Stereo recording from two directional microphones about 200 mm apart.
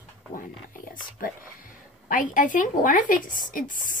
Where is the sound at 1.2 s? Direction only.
45° left (ahead or behind).